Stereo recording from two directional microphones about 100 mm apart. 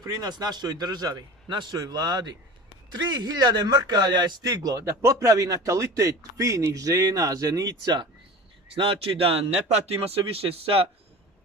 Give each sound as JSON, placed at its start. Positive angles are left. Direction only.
{"t": 0.0, "sound": "a man's voice", "side_deg": -40}
{"t": 8.7, "sound": "speech", "side_deg": -65}